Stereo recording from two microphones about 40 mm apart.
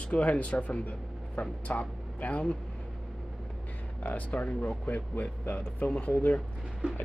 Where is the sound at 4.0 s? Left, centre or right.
Left.